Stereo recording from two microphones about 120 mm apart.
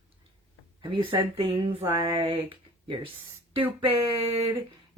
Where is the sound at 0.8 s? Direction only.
45° right (ahead or behind).